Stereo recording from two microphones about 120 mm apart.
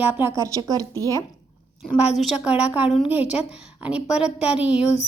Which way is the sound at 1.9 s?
5° right (ahead or behind).